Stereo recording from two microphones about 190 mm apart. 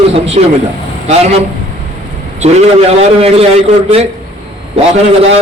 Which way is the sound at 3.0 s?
30° right (ahead or behind).